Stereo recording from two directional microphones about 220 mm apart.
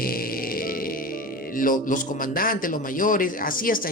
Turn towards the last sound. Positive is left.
turn(degrees=40)  # may be behind; listen again after turning